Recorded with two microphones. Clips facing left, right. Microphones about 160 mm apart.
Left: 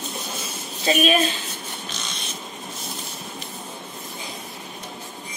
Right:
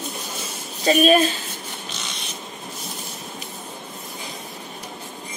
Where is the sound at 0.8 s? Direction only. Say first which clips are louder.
Right 4 dB; 40° right (ahead or behind).